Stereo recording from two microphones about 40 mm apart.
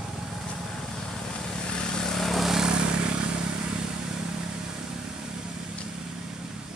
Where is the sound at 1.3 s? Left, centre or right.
Left; by 2.6 s centre.